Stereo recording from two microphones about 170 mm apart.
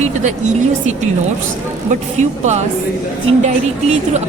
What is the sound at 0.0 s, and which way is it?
Speech, 45° right (ahead or behind).